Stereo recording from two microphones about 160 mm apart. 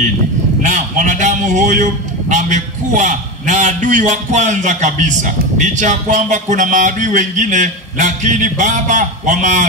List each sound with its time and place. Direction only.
0.6 s a man's voice: 50° right (ahead or behind)